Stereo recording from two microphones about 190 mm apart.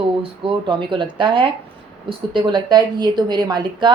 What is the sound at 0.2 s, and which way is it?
A woman's voice, 25° right (ahead or behind).